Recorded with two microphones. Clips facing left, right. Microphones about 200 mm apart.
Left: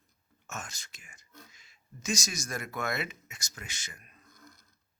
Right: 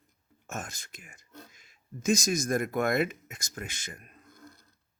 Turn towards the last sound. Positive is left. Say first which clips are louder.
# right 6 dB
turn(degrees=-50)  # may be behind; listen again after turning